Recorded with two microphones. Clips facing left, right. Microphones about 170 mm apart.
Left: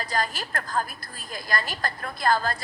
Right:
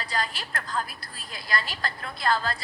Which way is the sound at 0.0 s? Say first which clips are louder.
Left 3 dB; 45° left (ahead or behind).